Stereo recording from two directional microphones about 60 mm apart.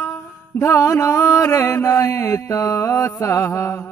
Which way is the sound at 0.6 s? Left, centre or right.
Left.